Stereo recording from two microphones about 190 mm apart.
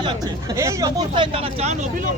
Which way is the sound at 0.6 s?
20° right (ahead or behind).